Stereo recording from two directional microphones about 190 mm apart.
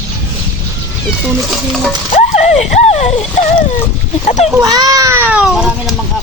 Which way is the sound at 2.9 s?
35° left (ahead or behind).